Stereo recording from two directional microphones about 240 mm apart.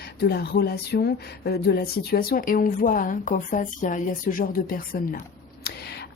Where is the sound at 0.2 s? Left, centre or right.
Left.